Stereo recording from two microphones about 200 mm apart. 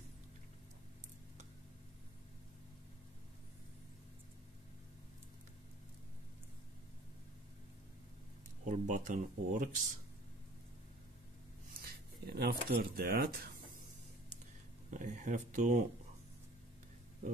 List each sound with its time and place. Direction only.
8.6 s speech: 40° right (ahead or behind)
11.8 s speech: 50° right (ahead or behind)
14.9 s speech: 40° right (ahead or behind)